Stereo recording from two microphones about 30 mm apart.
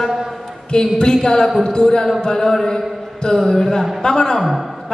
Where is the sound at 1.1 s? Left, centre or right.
Centre.